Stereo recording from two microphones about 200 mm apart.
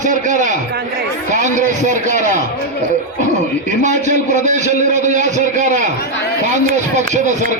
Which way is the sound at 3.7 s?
35° right (ahead or behind).